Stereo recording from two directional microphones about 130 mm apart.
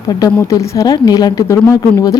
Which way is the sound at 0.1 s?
30° left (ahead or behind).